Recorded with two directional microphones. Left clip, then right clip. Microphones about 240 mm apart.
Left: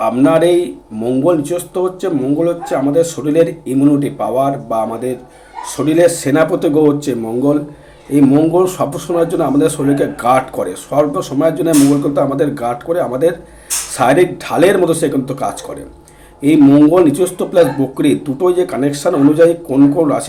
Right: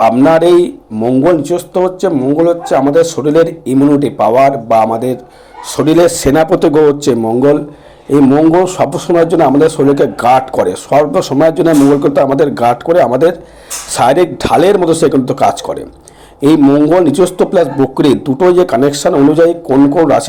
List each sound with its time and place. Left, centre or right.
0.1 s a man's voice: right